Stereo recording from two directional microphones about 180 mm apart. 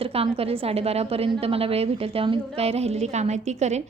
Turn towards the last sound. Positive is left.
turn(degrees=-40)  # may be behind; listen again after turning